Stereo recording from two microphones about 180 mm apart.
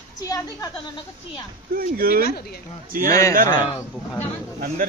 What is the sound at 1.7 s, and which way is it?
Speech, 55° right (ahead or behind).